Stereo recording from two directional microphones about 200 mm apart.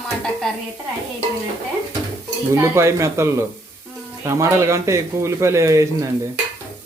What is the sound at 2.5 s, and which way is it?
Speech, 15° right (ahead or behind).